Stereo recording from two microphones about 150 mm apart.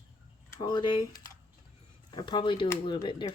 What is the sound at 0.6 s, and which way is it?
A woman's voice, 30° left (ahead or behind).